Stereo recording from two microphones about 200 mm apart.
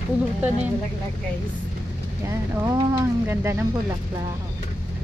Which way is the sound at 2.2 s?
15° right (ahead or behind).